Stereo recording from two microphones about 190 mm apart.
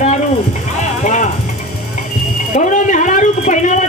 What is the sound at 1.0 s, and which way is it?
Music, 40° left (ahead or behind).